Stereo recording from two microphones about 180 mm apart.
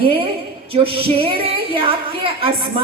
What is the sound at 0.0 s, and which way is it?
A woman's voice, 30° right (ahead or behind).